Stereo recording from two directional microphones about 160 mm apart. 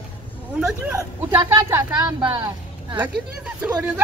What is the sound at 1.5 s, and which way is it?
A woman's voice, 20° right (ahead or behind).